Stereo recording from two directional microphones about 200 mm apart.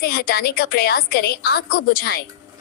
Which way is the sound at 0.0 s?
50° left (ahead or behind).